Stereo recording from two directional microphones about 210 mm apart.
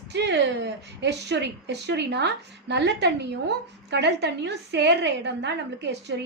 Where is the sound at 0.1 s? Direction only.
55° right (ahead or behind).